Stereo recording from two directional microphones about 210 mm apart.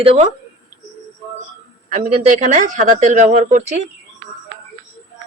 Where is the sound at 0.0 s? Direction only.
25° right (ahead or behind).